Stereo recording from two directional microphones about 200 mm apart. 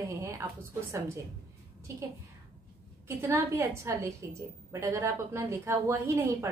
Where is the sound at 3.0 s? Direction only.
15° right (ahead or behind).